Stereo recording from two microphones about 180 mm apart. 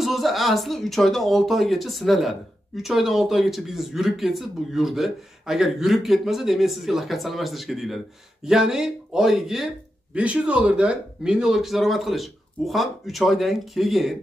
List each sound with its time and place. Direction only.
0.0 s speech: centre (ahead or behind)